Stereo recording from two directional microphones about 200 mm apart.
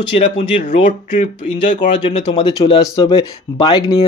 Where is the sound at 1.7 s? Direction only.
35° left (ahead or behind).